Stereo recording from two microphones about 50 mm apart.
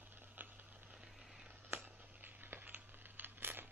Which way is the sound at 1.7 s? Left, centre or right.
Right.